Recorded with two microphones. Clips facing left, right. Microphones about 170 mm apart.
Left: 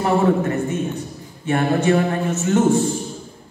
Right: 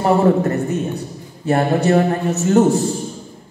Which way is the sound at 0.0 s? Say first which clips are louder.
Right 3 dB; 40° right (ahead or behind).